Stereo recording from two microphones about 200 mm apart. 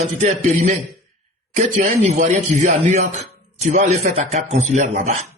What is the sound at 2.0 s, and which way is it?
Speech, 35° right (ahead or behind).